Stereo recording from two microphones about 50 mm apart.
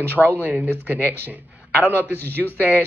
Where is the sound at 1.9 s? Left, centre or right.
Right.